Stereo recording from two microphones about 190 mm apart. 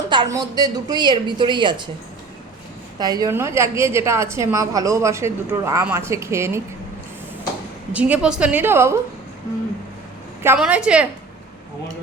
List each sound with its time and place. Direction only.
0.1 s speech: 20° right (ahead or behind)
3.0 s a woman's voice: 20° right (ahead or behind)
7.9 s a woman's voice: 5° right (ahead or behind)
10.4 s a woman's voice: 10° right (ahead or behind)